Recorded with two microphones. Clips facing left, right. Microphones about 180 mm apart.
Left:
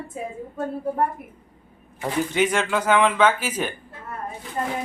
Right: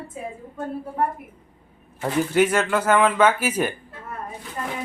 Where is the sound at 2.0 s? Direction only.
5° right (ahead or behind).